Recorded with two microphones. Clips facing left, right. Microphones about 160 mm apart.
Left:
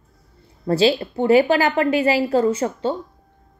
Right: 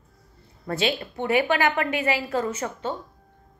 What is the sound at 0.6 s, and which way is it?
A woman's voice, 35° left (ahead or behind).